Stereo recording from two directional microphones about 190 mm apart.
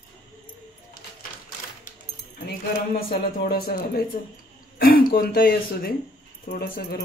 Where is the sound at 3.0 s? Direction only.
55° left (ahead or behind).